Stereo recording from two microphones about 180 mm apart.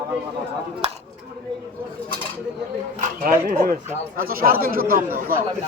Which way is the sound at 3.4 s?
50° right (ahead or behind).